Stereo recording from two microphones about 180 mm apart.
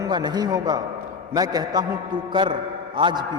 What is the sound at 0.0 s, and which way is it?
A man's voice, 25° right (ahead or behind).